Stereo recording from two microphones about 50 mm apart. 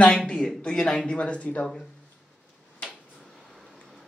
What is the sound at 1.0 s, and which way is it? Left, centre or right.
Speech, left.